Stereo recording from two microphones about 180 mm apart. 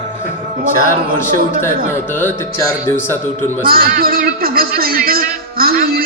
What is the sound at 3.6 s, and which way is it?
A man's voice, 55° right (ahead or behind).